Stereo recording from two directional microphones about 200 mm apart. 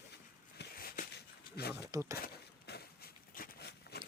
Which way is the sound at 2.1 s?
50° left (ahead or behind).